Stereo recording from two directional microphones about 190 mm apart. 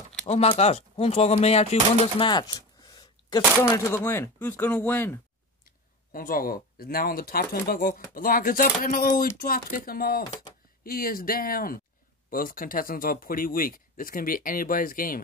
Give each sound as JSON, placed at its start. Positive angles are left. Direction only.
{"t": 0.3, "sound": "speech", "side_deg": 35}
{"t": 2.1, "sound": "a sound", "side_deg": 25}
{"t": 3.7, "sound": "speech", "side_deg": 15}
{"t": 6.1, "sound": "speech", "side_deg": 50}